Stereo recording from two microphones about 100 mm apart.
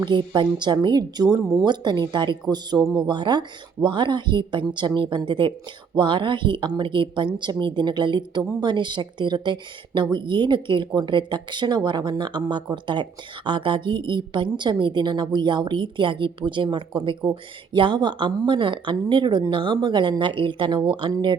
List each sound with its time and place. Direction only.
0.0 s a woman's voice: 50° right (ahead or behind)
2.8 s speech: 5° right (ahead or behind)
3.1 s a woman's voice: 50° right (ahead or behind)